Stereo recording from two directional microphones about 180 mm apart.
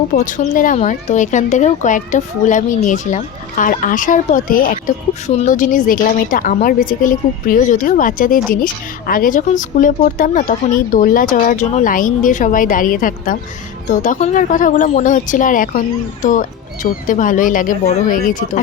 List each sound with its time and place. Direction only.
0.1 s speech: 50° left (ahead or behind)